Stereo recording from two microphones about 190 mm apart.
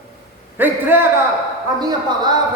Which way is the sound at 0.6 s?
10° right (ahead or behind).